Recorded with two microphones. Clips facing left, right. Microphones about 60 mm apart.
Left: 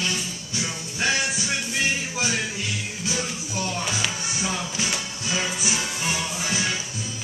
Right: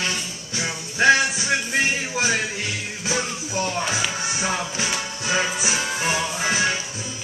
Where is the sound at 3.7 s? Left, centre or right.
Right.